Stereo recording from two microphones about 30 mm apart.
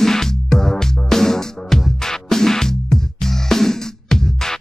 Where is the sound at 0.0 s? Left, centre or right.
Centre.